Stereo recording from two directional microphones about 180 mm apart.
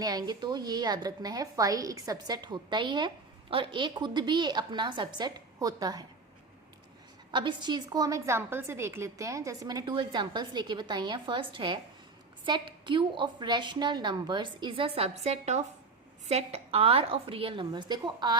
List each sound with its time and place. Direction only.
0.0 s a woman's voice: 20° right (ahead or behind)
7.3 s a woman's voice: 25° right (ahead or behind)